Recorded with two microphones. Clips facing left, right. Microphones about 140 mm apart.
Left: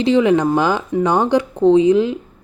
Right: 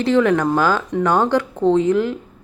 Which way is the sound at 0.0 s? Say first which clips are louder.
Left 2 dB; 15° left (ahead or behind).